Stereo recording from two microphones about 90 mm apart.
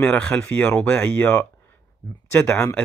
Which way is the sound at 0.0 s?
20° left (ahead or behind).